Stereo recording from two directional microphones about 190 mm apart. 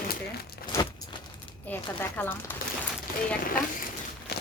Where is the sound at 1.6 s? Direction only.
10° left (ahead or behind).